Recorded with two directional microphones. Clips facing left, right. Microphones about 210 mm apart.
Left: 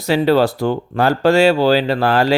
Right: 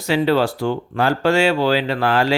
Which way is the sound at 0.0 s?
40° left (ahead or behind).